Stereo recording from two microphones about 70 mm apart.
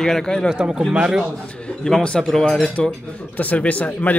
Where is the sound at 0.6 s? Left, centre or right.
Centre.